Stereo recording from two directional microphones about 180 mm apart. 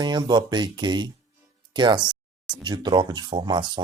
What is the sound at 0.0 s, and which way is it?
Speech, 25° right (ahead or behind).